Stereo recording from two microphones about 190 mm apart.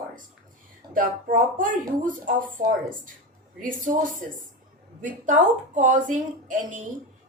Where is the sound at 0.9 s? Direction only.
45° right (ahead or behind).